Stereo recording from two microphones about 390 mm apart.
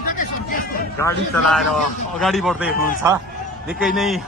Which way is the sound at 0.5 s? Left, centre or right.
Left.